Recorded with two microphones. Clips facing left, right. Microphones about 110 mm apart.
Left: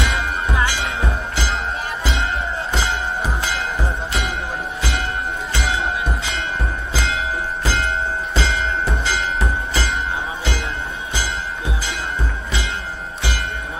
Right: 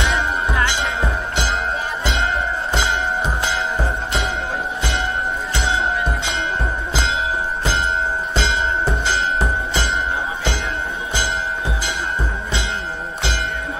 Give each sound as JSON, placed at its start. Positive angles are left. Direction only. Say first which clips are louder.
{"t": 6.9, "sound": "music", "louder": "right 1 dB", "side_deg": -25}
{"t": 8.4, "sound": "music", "louder": "right 1 dB", "side_deg": -30}